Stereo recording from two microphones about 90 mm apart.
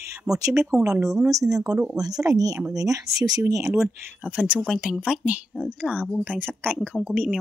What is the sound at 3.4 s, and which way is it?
Speech, 30° right (ahead or behind).